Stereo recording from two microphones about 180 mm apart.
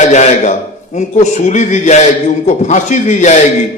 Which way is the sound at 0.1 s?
40° left (ahead or behind).